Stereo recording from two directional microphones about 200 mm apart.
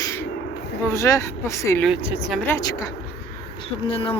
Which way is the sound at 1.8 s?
Centre (ahead or behind).